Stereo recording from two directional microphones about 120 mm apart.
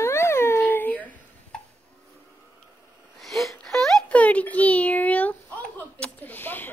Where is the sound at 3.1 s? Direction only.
Centre (ahead or behind).